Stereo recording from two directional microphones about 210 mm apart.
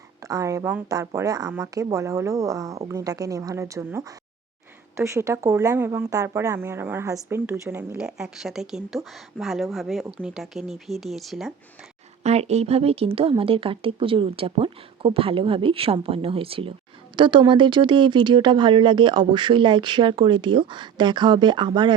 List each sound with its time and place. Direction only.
0.2 s speech: 15° right (ahead or behind)
12.2 s speech: 30° right (ahead or behind)